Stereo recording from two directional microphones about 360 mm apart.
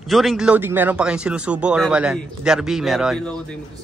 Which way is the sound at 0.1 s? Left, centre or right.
Centre.